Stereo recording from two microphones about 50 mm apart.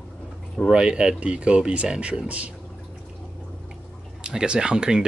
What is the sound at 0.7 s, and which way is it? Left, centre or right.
Speech, centre.